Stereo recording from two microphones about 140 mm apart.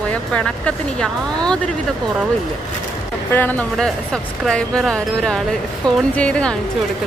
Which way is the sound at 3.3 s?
15° left (ahead or behind).